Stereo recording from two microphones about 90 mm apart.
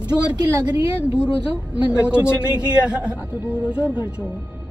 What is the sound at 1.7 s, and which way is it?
A woman's voice, 10° right (ahead or behind).